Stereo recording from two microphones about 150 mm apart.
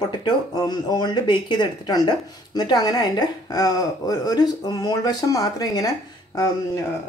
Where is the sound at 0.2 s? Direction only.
25° left (ahead or behind).